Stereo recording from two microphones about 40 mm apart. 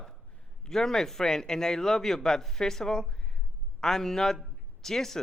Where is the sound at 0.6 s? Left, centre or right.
Centre.